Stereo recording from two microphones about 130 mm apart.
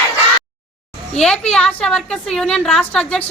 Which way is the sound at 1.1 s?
5° left (ahead or behind).